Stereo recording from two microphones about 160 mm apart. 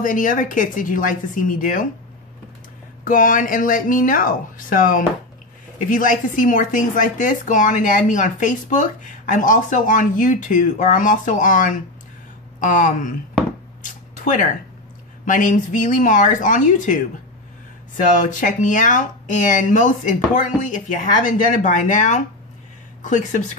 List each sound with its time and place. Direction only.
0.0 s speech: 55° left (ahead or behind)
3.1 s a woman's voice: 60° left (ahead or behind)
13.8 s a sound: 55° left (ahead or behind)
15.2 s a woman's voice: 55° left (ahead or behind)
18.1 s a woman's voice: 55° left (ahead or behind)